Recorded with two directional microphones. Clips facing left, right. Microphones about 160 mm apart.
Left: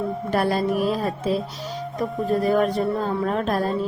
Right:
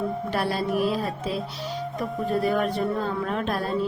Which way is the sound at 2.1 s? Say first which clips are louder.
Left 3 dB; centre (ahead or behind).